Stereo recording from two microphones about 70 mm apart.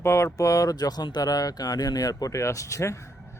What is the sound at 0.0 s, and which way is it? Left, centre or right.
Speech, left.